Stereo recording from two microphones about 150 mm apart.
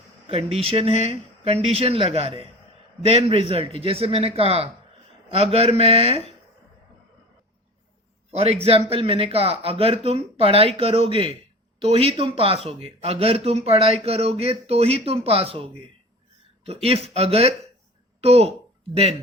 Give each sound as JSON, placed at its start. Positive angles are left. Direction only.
{"t": 0.3, "sound": "speech", "side_deg": -40}
{"t": 8.3, "sound": "a man's voice", "side_deg": -45}